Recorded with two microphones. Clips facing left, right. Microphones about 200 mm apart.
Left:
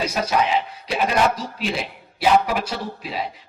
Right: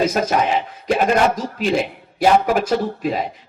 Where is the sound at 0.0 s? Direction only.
50° right (ahead or behind).